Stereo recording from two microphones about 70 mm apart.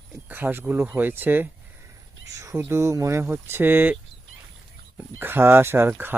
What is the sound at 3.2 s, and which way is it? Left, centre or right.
Speech, right.